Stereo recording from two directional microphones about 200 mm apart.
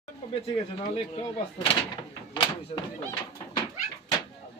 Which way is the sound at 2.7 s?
30° left (ahead or behind).